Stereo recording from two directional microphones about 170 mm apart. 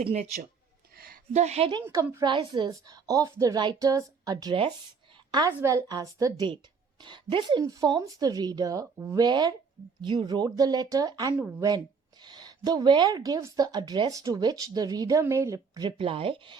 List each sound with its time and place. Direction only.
0.0 s a woman's voice: 40° right (ahead or behind)
0.9 s a sound: 60° right (ahead or behind)
1.3 s a woman's voice: 40° right (ahead or behind)
1.8 s a woman's voice: 20° right (ahead or behind)